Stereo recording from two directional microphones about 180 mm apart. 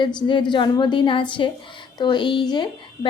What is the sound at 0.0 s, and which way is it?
A woman's voice, 25° left (ahead or behind).